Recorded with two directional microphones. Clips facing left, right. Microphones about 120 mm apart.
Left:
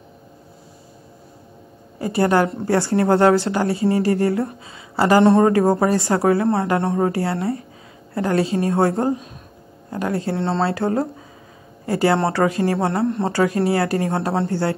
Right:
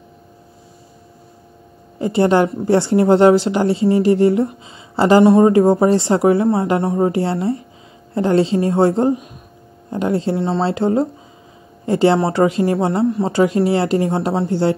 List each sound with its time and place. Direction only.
2.0 s a woman's voice: 25° right (ahead or behind)
13.0 s speech: centre (ahead or behind)
13.3 s a woman's voice: 20° right (ahead or behind)